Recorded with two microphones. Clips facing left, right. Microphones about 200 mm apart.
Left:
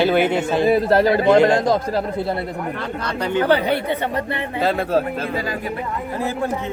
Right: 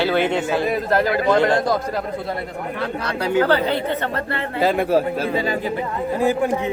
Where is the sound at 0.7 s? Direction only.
30° left (ahead or behind).